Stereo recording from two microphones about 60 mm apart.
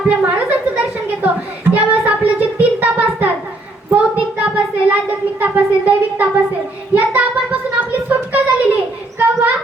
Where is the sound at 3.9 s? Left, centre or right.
Right.